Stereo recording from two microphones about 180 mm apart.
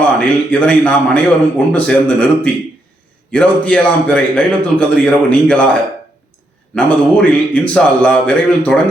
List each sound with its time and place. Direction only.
0.5 s a man's voice: 5° left (ahead or behind)
6.7 s a man's voice: 5° left (ahead or behind)